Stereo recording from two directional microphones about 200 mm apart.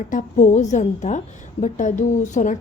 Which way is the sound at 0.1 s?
40° left (ahead or behind).